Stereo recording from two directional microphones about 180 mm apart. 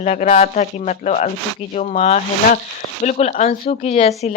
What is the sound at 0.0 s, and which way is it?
Speech, 40° left (ahead or behind).